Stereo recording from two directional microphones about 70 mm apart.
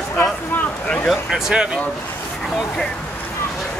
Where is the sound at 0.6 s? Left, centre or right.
Centre.